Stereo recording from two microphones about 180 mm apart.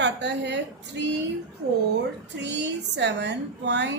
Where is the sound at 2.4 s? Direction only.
75° right (ahead or behind).